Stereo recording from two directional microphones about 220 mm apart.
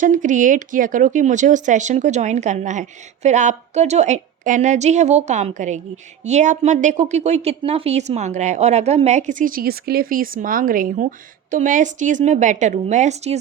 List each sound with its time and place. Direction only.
0.0 s a woman's voice: 35° right (ahead or behind)